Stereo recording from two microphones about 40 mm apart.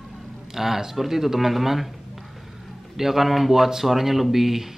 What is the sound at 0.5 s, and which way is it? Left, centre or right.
Speech, centre.